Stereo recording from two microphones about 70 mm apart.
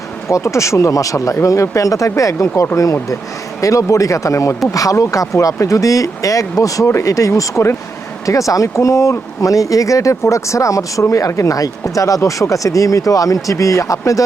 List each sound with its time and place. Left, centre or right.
0.3 s speech: left